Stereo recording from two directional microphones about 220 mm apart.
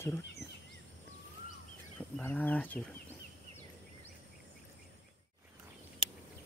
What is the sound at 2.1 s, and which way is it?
Speech, 10° left (ahead or behind).